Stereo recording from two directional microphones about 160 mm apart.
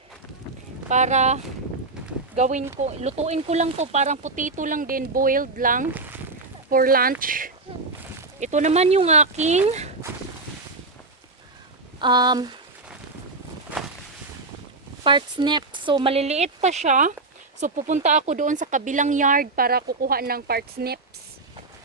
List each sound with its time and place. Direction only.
0.9 s speech: 50° right (ahead or behind)
5.9 s speech: 10° right (ahead or behind)
6.7 s speech: 65° right (ahead or behind)
8.4 s speech: 45° right (ahead or behind)
11.9 s speech: 30° right (ahead or behind)
15.0 s speech: 30° right (ahead or behind); by 21.0 s 75° right (ahead or behind)